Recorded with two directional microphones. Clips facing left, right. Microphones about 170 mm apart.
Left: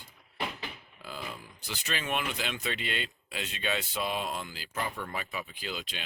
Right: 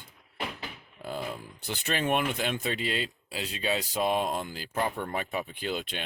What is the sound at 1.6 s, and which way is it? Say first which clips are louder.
Speech: right 6 dB; 55° right (ahead or behind).